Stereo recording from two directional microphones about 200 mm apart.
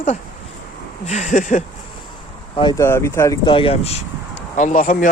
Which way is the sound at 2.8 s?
15° left (ahead or behind).